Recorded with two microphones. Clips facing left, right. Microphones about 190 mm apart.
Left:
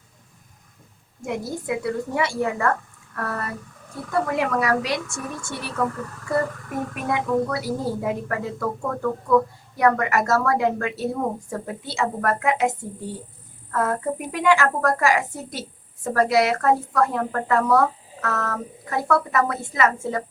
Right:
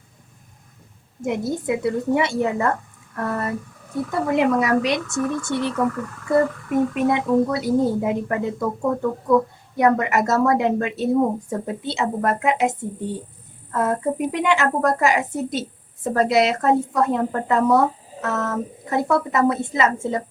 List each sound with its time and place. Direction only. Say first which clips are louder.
1.2 s a woman's voice: right 5 dB; 20° right (ahead or behind)